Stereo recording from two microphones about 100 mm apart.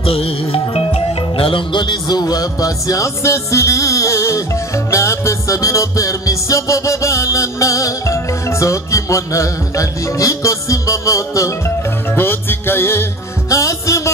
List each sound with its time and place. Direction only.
0.0 s music: 70° left (ahead or behind); by 11.5 s 30° left (ahead or behind)
12.2 s music: 20° left (ahead or behind)